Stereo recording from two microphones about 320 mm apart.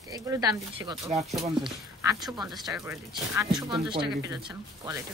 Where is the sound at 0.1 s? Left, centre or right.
Centre.